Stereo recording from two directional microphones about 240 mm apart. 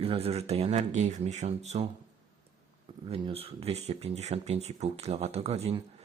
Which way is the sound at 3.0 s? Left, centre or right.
Right.